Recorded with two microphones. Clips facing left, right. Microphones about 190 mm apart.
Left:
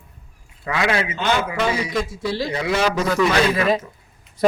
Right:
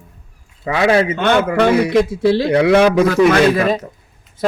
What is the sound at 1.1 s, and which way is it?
A man's voice, 60° right (ahead or behind).